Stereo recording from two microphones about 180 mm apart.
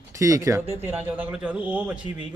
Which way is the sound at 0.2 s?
15° right (ahead or behind).